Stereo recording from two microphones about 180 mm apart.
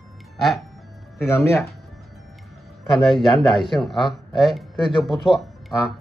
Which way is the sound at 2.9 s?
Centre (ahead or behind).